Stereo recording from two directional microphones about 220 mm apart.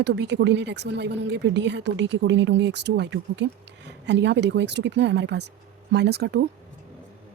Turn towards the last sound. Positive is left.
turn(degrees=-50)  # may be behind; listen again after turning